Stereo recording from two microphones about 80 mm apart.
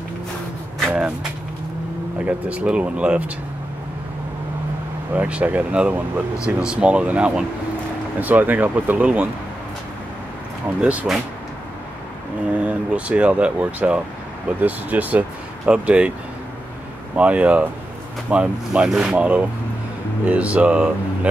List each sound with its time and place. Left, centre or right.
2.1 s speech: centre
5.1 s speech: centre
10.8 s speech: centre
12.5 s speech: centre
17.1 s speech: centre